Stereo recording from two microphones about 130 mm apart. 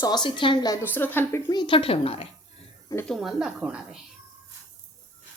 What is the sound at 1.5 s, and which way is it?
Speech, 40° left (ahead or behind).